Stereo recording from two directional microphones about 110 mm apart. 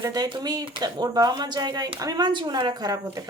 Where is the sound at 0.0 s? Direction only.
35° right (ahead or behind).